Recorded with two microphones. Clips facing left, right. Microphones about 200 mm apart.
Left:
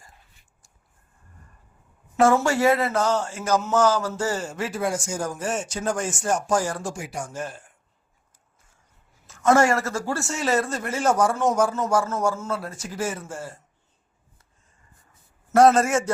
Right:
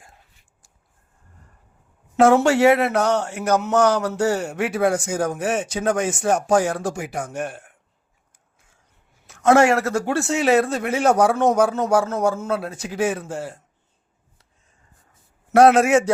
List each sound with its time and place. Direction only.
2.1 s speech: 70° right (ahead or behind)
9.2 s speech: 65° right (ahead or behind)
15.5 s a man's voice: 65° right (ahead or behind)